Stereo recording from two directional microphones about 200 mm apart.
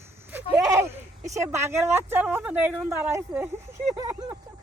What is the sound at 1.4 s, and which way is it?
Speech, 15° right (ahead or behind).